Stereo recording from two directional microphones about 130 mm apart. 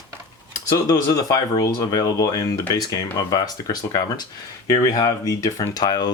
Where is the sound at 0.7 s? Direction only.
30° left (ahead or behind).